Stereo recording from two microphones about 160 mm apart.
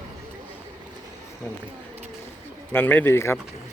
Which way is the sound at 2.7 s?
10° left (ahead or behind).